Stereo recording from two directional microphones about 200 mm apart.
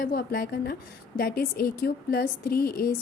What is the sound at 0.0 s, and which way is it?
A woman's voice, 50° left (ahead or behind).